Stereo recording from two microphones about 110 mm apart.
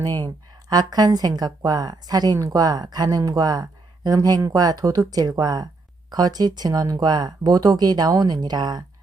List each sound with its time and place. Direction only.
0.7 s a woman's voice: 35° right (ahead or behind)